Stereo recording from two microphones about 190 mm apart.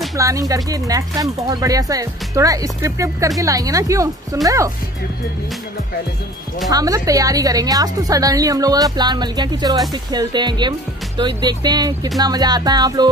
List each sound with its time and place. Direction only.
0.1 s speech: 20° right (ahead or behind)
6.7 s a woman's voice: 20° right (ahead or behind)